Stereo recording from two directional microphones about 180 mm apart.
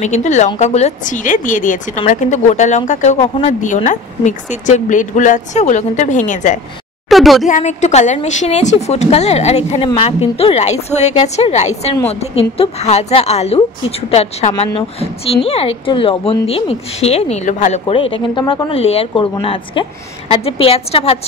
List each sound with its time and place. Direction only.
0.0 s a woman's voice: 40° left (ahead or behind)
7.1 s speech: centre (ahead or behind)
7.4 s a woman's voice: 45° left (ahead or behind)